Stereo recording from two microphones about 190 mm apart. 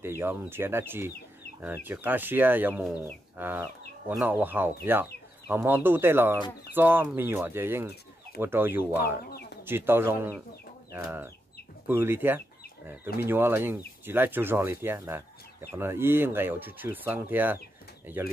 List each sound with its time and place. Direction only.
0.0 s speech: 10° right (ahead or behind)
9.3 s chicken: 55° left (ahead or behind)
9.7 s speech: 10° right (ahead or behind)
11.9 s speech: 10° right (ahead or behind)